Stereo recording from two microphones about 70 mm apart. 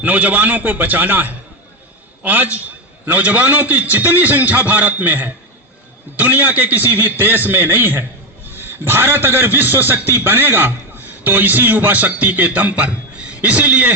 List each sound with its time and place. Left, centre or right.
0.0 s a man's voice: right